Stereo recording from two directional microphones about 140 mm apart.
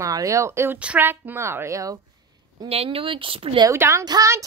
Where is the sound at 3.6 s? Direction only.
20° right (ahead or behind).